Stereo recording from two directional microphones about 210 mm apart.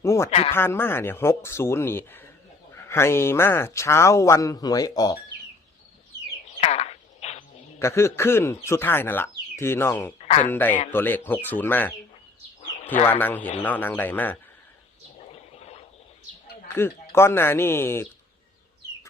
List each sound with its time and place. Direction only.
0.0 s speech: 15° left (ahead or behind)
6.6 s a sound: 30° left (ahead or behind)
7.8 s speech: 10° left (ahead or behind)
10.2 s speech: 30° left (ahead or behind)
10.5 s speech: 10° left (ahead or behind)
12.6 s bird: 30° left (ahead or behind)
13.1 s speech: 10° left (ahead or behind)
15.2 s gargling: 30° left (ahead or behind)
16.7 s speech: 10° left (ahead or behind)